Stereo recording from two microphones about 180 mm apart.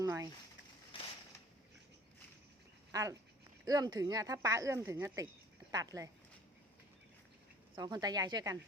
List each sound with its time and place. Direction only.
0.0 s a sound: 15° right (ahead or behind)
2.9 s speech: 20° right (ahead or behind)
7.8 s speech: 20° right (ahead or behind)